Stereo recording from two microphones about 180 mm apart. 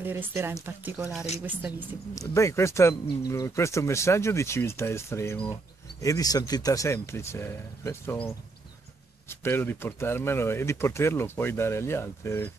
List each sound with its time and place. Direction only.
0.0 s speech: 10° right (ahead or behind)
2.1 s speech: 15° left (ahead or behind)